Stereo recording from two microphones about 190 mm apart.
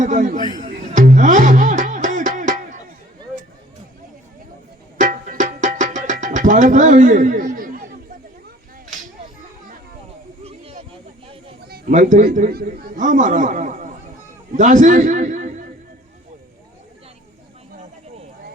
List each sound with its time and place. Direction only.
0.0 s a man's voice: 40° right (ahead or behind)
0.6 s music: 40° right (ahead or behind)
4.9 s music: 45° right (ahead or behind)
11.7 s a man's voice: 40° right (ahead or behind)